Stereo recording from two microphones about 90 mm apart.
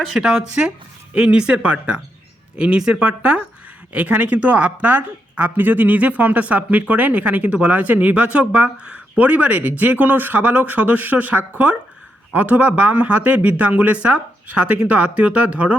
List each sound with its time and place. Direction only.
0.0 s speech: centre (ahead or behind)